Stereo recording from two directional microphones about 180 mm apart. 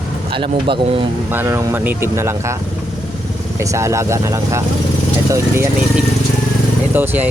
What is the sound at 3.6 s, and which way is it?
Speech, 15° right (ahead or behind).